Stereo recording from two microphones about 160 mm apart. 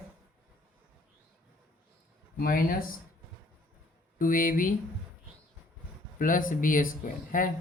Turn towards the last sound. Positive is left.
turn(degrees=60)  # may be behind; listen again after turning